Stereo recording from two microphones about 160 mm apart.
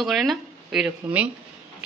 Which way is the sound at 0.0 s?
Centre (ahead or behind).